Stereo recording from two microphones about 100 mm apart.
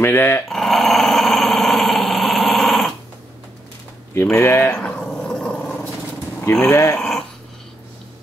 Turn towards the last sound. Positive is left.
turn(degrees=5)  # may be behind; listen again after turning